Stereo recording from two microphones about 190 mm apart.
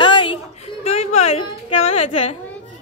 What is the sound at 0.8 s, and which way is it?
Music, 35° left (ahead or behind).